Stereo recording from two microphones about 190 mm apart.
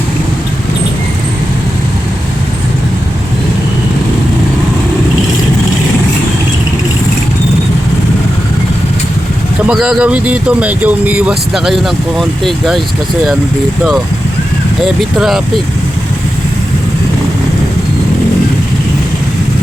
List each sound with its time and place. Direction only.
9.6 s speech: 5° right (ahead or behind)